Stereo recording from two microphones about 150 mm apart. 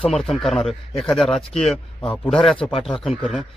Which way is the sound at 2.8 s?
Centre (ahead or behind).